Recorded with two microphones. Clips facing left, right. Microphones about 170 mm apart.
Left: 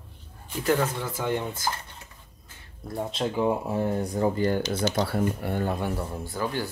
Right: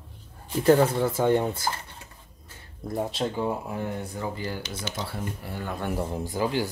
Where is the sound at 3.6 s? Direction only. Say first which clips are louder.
Left 5 dB; 30° left (ahead or behind).